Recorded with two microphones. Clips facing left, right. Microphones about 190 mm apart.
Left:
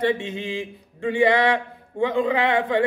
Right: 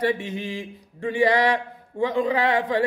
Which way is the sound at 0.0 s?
25° left (ahead or behind).